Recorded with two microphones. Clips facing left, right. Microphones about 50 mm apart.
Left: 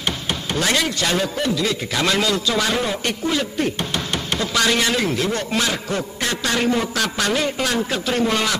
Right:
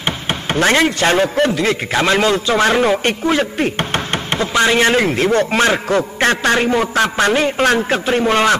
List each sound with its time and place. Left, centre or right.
0.0 s speech: right
6.6 s speech: right